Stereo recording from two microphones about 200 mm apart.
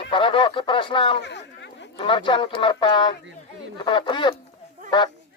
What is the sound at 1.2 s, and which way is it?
Chatter, 60° left (ahead or behind).